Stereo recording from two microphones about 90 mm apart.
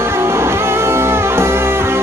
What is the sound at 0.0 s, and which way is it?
Music, 30° right (ahead or behind).